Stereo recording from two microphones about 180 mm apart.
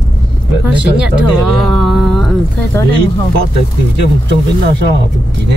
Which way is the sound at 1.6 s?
Centre (ahead or behind).